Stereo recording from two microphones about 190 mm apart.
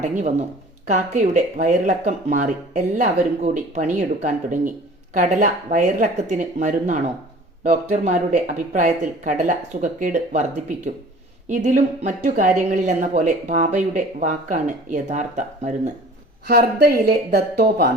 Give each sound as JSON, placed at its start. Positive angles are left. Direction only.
{"t": 0.0, "sound": "speech", "side_deg": -45}
{"t": 16.5, "sound": "speech", "side_deg": -50}